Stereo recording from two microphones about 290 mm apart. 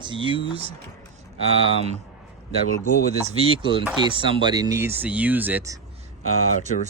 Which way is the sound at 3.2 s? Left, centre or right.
Centre.